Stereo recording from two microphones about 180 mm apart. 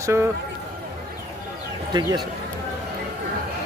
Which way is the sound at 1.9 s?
25° right (ahead or behind).